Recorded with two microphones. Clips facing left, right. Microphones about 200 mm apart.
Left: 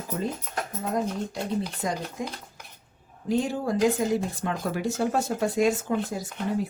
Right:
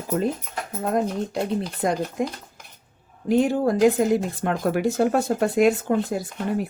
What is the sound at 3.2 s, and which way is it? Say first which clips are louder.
Speech: right 6 dB; 60° right (ahead or behind).